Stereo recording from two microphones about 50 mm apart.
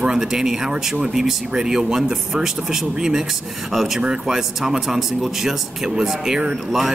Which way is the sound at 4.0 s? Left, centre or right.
Centre.